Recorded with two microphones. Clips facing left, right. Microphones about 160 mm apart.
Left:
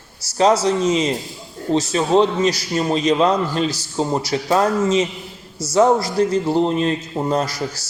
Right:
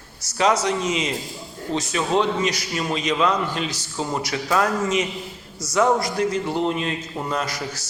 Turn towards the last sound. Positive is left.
turn(degrees=35)  # may be behind; listen again after turning